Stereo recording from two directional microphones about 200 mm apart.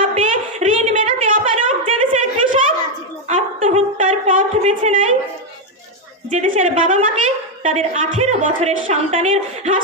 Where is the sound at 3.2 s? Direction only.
30° right (ahead or behind).